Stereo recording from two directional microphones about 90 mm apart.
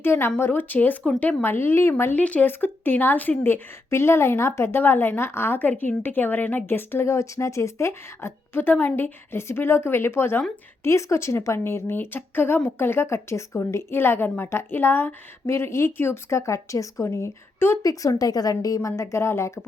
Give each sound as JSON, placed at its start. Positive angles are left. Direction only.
{"t": 0.0, "sound": "speech", "side_deg": 25}
{"t": 17.8, "sound": "a woman's voice", "side_deg": 40}